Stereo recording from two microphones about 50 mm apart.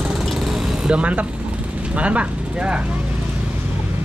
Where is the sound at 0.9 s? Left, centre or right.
Right.